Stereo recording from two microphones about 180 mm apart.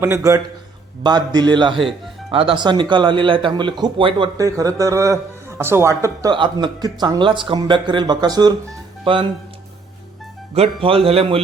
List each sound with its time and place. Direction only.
0.0 s a man's voice: 15° right (ahead or behind)
10.5 s a man's voice: 35° right (ahead or behind)